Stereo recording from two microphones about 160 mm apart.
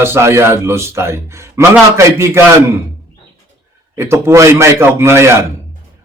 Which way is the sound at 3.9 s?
15° right (ahead or behind).